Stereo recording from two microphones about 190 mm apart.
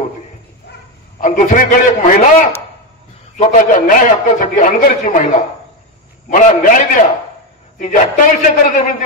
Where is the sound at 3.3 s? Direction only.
40° left (ahead or behind).